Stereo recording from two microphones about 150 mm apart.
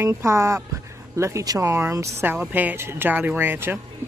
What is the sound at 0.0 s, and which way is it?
Speech, 20° right (ahead or behind).